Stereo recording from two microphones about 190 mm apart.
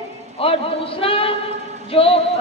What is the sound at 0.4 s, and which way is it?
A woman's voice, 30° left (ahead or behind).